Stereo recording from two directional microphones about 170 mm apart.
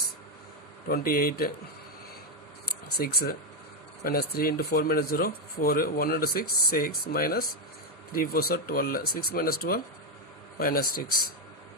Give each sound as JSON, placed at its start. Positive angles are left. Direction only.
{"t": 0.9, "sound": "speech", "side_deg": 60}
{"t": 2.6, "sound": "a sound", "side_deg": 65}
{"t": 4.0, "sound": "speech", "side_deg": 60}